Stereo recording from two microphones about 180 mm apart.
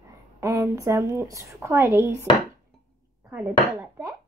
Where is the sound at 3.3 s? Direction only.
15° right (ahead or behind).